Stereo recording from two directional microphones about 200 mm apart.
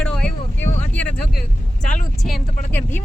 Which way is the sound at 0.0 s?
5° left (ahead or behind).